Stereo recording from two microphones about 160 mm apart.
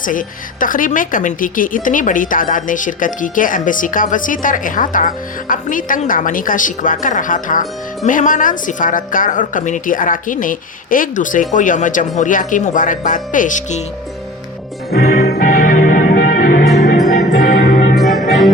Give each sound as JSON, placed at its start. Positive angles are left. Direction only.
{"t": 0.0, "sound": "a woman's voice", "side_deg": 55}
{"t": 15.1, "sound": "music", "side_deg": 70}
{"t": 17.9, "sound": "music", "side_deg": 0}